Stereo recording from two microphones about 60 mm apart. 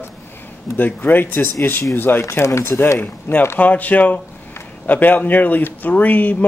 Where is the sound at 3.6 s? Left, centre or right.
Left.